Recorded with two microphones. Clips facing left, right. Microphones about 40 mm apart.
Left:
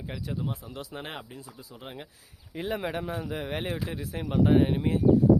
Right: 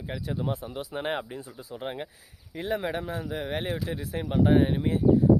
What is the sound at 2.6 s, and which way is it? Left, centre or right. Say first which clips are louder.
Speech: right 2 dB; centre.